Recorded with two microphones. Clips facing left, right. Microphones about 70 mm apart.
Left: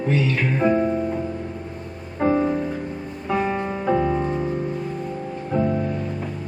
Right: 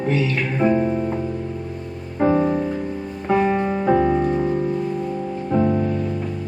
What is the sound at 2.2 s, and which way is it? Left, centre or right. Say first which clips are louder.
Music: right 2 dB; right.